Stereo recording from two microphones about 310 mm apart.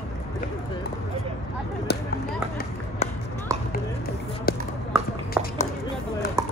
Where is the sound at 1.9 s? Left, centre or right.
Left.